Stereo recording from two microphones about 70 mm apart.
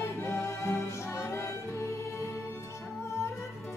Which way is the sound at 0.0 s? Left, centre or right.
Left.